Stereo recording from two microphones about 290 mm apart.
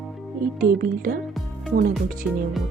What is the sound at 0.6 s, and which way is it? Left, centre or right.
A woman's voice, right.